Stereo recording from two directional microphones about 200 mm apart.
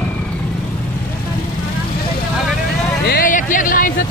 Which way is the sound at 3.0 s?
45° left (ahead or behind).